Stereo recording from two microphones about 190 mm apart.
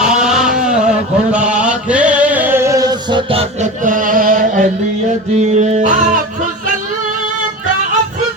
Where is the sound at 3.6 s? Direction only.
45° right (ahead or behind).